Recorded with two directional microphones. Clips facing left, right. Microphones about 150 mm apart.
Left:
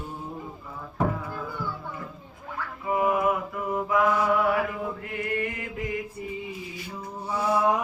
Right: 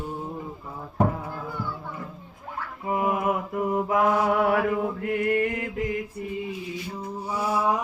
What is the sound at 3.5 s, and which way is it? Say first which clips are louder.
Mantra: right 2 dB; 45° right (ahead or behind).